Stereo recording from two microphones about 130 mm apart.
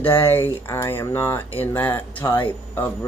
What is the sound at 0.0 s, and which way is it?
Speech, 15° left (ahead or behind).